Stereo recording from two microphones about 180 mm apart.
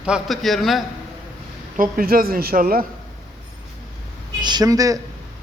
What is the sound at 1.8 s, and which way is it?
A man's voice, 55° right (ahead or behind).